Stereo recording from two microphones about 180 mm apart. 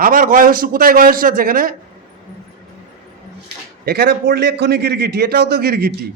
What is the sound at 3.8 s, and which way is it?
A man's voice, 60° right (ahead or behind).